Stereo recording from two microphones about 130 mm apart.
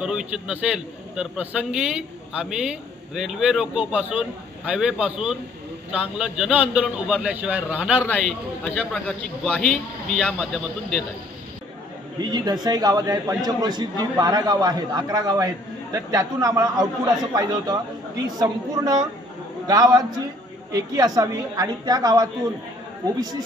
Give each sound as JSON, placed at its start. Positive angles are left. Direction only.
{"t": 0.0, "sound": "a man's voice", "side_deg": -5}
{"t": 8.0, "sound": "a man's voice", "side_deg": 10}
{"t": 12.2, "sound": "a man's voice", "side_deg": -35}